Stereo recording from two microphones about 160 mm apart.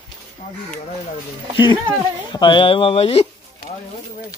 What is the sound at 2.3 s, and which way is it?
Speech, 30° left (ahead or behind).